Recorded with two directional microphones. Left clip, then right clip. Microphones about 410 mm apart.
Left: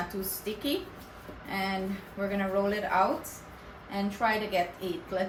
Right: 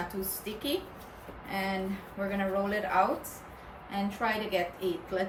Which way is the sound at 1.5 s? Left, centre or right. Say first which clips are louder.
Left 1 dB; centre.